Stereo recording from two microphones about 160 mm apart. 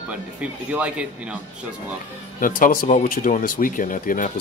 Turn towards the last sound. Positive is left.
turn(degrees=55)  # may be behind; listen again after turning